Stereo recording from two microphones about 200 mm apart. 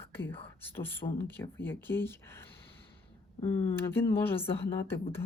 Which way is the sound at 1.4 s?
10° left (ahead or behind).